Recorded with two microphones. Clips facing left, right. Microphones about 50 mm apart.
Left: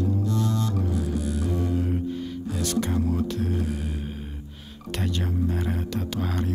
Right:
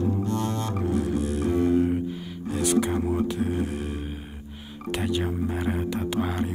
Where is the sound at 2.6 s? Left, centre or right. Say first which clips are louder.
Right 3 dB; centre.